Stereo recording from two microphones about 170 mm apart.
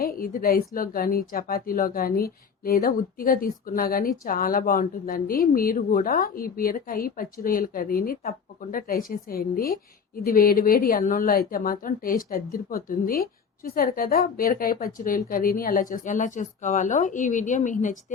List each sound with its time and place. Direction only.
0.0 s speech: 60° left (ahead or behind)